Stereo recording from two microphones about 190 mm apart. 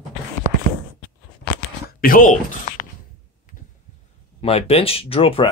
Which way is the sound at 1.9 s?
50° left (ahead or behind).